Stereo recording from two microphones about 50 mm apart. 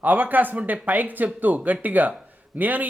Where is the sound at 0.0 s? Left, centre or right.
Right.